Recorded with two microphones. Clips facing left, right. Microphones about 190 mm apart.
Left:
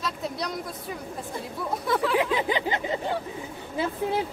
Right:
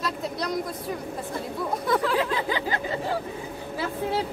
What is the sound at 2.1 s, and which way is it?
Speech, 15° left (ahead or behind).